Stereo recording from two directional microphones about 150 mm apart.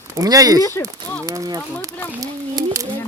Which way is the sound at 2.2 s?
25° right (ahead or behind).